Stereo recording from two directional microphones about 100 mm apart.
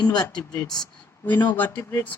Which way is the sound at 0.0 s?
45° left (ahead or behind).